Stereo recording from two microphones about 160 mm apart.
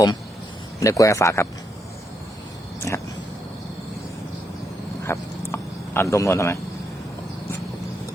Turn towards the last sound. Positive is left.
turn(degrees=20)  # may be behind; listen again after turning